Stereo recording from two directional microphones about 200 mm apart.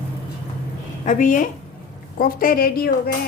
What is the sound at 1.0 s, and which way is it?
A woman's voice, 40° left (ahead or behind).